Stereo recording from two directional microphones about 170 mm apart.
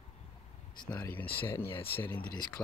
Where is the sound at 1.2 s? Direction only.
30° left (ahead or behind).